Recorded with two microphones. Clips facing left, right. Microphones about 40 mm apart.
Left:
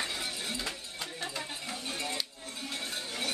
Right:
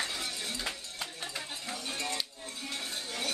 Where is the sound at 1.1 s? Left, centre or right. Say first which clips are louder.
Left 2 dB; centre.